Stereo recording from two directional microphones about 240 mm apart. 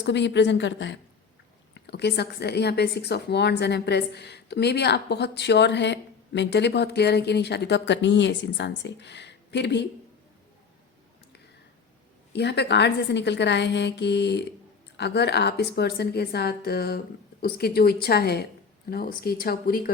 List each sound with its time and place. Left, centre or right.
0.0 s a woman's voice: left
12.3 s a woman's voice: left